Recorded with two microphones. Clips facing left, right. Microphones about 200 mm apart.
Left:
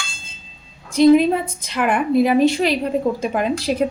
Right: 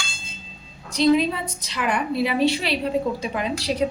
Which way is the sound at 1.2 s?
50° left (ahead or behind).